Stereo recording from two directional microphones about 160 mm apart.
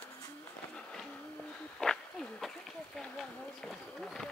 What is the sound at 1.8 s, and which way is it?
Speech, 5° left (ahead or behind).